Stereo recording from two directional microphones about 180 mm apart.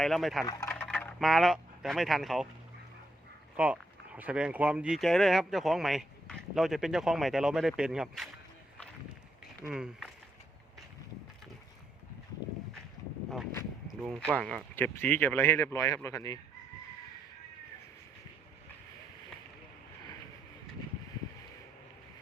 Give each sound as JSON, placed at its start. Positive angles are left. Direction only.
{"t": 0.0, "sound": "speech", "side_deg": 0}
{"t": 0.4, "sound": "speech", "side_deg": 20}
{"t": 0.7, "sound": "speech", "side_deg": 5}
{"t": 3.6, "sound": "speech", "side_deg": -5}
{"t": 9.6, "sound": "speech", "side_deg": -5}
{"t": 13.8, "sound": "a sound", "side_deg": 0}
{"t": 14.3, "sound": "speech", "side_deg": 5}